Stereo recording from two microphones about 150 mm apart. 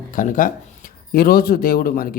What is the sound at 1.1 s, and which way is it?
Speech, 90° left.